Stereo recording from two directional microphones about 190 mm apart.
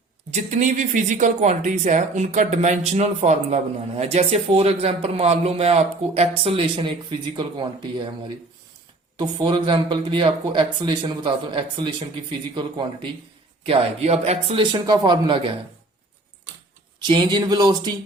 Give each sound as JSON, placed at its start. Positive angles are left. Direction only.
{"t": 0.3, "sound": "speech", "side_deg": -35}
{"t": 9.1, "sound": "speech", "side_deg": -25}
{"t": 17.0, "sound": "speech", "side_deg": -25}